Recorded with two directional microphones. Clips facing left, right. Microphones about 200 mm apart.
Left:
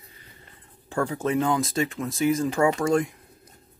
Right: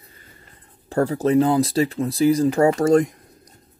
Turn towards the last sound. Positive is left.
turn(degrees=-40)  # may be behind; listen again after turning